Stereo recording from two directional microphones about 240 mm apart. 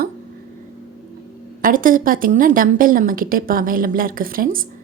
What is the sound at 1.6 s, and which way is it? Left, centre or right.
Speech, right.